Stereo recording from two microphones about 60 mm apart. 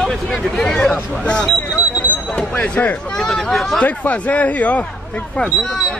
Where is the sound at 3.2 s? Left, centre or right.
Centre.